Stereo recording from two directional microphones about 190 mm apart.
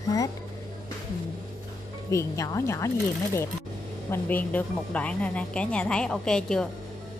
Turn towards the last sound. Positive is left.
turn(degrees=5)  # may be behind; listen again after turning